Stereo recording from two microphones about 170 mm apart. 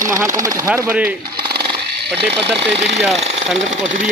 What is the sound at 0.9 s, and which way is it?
Speech, 10° right (ahead or behind).